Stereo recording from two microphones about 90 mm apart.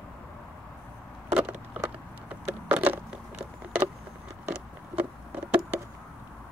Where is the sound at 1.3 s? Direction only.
20° right (ahead or behind).